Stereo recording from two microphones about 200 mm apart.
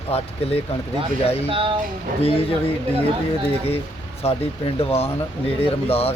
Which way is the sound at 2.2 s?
30° left (ahead or behind).